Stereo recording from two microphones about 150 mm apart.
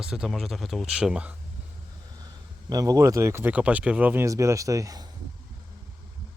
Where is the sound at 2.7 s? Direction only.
25° right (ahead or behind).